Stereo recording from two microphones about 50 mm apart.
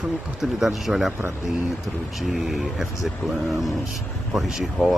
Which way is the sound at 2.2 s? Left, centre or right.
Centre.